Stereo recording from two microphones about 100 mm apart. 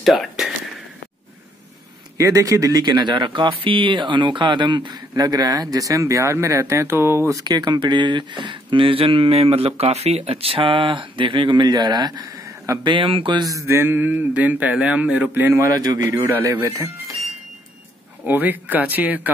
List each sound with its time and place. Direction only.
0.0 s a sound: centre (ahead or behind)
2.1 s speech: 35° right (ahead or behind)
12.8 s speech: 60° right (ahead or behind)
13.7 s speech: 20° right (ahead or behind)
18.2 s speech: 20° right (ahead or behind)